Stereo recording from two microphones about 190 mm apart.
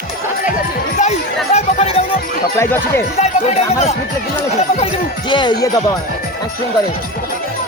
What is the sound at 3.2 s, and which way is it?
Speech, 35° left (ahead or behind).